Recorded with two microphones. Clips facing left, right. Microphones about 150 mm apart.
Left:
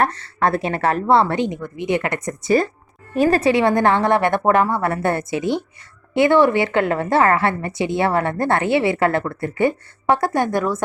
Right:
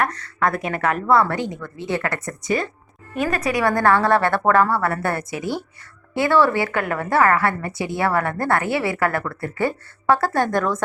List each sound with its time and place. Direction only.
0.0 s a woman's voice: 30° left (ahead or behind)
3.2 s a woman's voice: 30° left (ahead or behind); by 10.8 s 10° left (ahead or behind)